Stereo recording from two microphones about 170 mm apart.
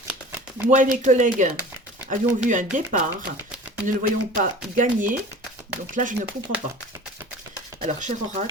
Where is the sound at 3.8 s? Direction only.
55° right (ahead or behind).